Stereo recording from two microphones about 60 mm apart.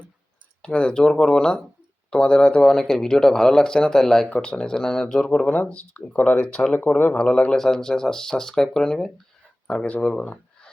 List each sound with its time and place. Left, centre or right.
0.6 s speech: centre
4.3 s speech: centre